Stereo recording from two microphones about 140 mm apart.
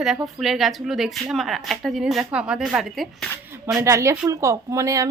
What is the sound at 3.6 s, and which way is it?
Speech, 20° right (ahead or behind).